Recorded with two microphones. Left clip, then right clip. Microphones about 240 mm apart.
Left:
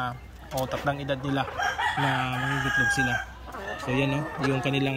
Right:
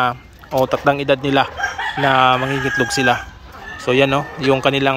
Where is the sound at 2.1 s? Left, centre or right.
Right.